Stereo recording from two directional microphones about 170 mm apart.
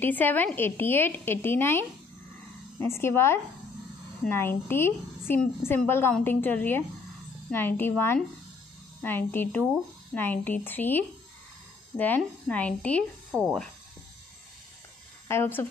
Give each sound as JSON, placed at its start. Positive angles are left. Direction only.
{"t": 0.0, "sound": "a woman's voice", "side_deg": 10}
{"t": 9.0, "sound": "a woman's voice", "side_deg": 10}
{"t": 15.2, "sound": "a woman's voice", "side_deg": 15}